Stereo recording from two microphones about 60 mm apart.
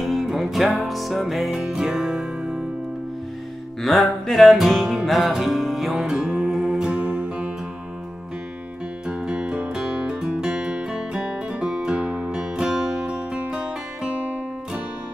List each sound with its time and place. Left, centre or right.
0.0 s music: centre
3.8 s music: centre
6.9 s music: centre
9.0 s music: centre